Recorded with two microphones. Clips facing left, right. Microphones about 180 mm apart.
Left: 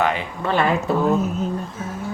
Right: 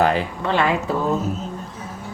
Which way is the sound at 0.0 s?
35° right (ahead or behind).